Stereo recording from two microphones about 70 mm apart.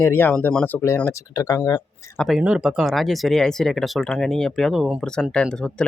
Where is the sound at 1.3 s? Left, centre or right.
Left.